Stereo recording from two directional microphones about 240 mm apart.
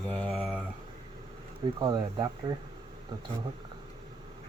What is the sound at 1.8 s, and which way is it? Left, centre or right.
Speech, centre.